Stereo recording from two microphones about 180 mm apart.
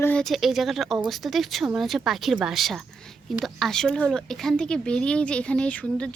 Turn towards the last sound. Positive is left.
turn(degrees=5)  # may be behind; listen again after turning